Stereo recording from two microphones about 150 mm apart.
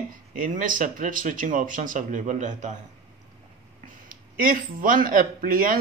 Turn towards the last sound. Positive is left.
turn(degrees=-65)  # may be behind; listen again after turning